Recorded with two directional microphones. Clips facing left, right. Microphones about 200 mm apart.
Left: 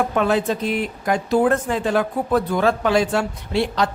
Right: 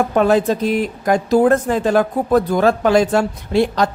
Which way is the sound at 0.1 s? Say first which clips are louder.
Right 5 dB; 40° right (ahead or behind).